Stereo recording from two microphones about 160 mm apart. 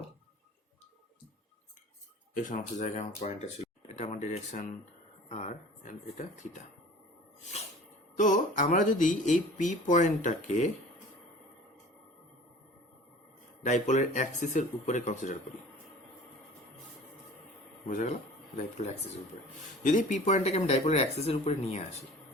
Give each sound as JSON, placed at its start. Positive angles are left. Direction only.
{"t": 2.4, "sound": "speech", "side_deg": 50}
{"t": 8.2, "sound": "speech", "side_deg": 55}
{"t": 13.7, "sound": "speech", "side_deg": 50}
{"t": 17.8, "sound": "speech", "side_deg": 50}